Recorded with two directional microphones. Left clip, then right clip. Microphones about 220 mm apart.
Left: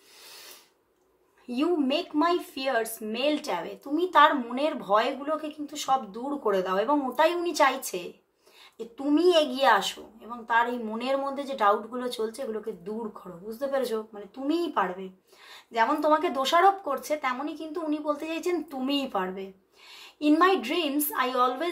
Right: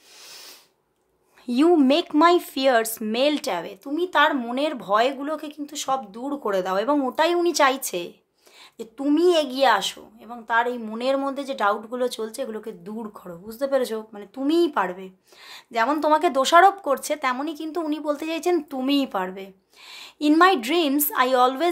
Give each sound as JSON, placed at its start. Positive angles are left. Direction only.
{"t": 1.5, "sound": "a woman's voice", "side_deg": -50}